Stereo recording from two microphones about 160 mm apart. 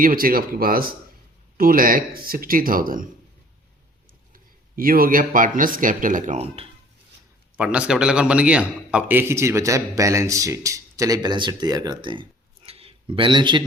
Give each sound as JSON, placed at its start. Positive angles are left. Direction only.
{"t": 0.0, "sound": "speech", "side_deg": -60}
{"t": 4.8, "sound": "speech", "side_deg": -65}
{"t": 7.5, "sound": "a man's voice", "side_deg": -5}